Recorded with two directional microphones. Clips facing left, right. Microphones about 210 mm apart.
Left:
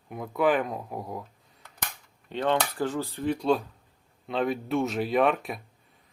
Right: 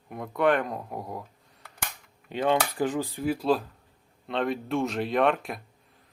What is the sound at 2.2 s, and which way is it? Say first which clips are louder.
Speech: right 1 dB; 10° right (ahead or behind).